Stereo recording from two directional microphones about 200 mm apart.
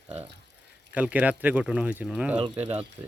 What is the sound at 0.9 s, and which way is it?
Speech, 5° right (ahead or behind).